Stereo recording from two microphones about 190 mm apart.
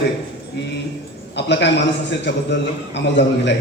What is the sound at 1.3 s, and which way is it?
Speech, 65° left (ahead or behind).